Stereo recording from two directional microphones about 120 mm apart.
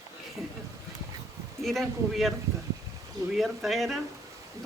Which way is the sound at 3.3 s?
Centre (ahead or behind).